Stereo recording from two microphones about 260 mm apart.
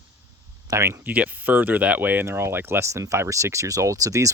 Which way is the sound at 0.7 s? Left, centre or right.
Centre.